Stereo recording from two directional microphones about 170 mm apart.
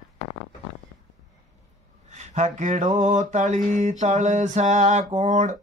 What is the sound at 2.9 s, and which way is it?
Mantra, 50° right (ahead or behind).